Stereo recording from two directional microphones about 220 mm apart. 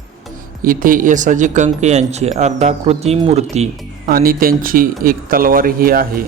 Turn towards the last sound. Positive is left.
turn(degrees=-40)  # may be behind; listen again after turning